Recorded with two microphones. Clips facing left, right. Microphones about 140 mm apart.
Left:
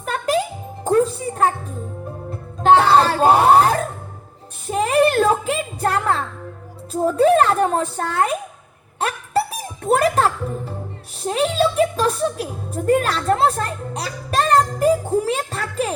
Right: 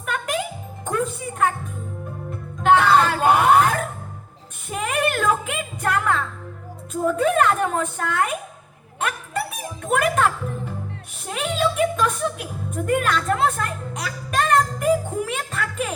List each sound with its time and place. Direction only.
0.0 s music: 35° left (ahead or behind)
4.7 s a sound: 35° left (ahead or behind)
6.9 s a woman's voice: 35° left (ahead or behind)
9.0 s music: 35° left (ahead or behind)